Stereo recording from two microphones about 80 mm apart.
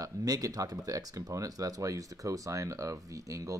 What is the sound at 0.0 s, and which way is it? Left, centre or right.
Speech, right.